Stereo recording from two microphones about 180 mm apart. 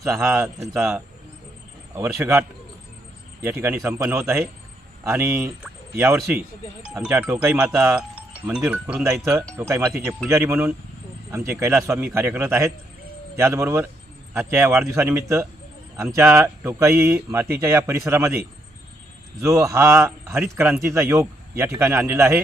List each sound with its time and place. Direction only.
0.0 s speech: 15° right (ahead or behind)
3.4 s speech: 10° right (ahead or behind)